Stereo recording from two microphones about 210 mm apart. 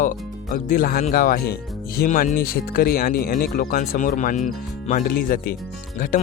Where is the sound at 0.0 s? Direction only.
40° left (ahead or behind).